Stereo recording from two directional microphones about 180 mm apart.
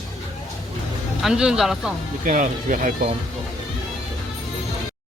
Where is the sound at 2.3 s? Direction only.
45° right (ahead or behind).